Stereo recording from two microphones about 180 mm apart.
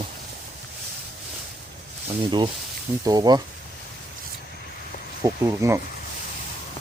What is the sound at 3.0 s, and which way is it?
Speech, 20° right (ahead or behind).